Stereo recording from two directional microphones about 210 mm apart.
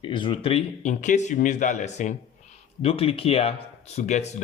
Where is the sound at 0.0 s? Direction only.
25° left (ahead or behind).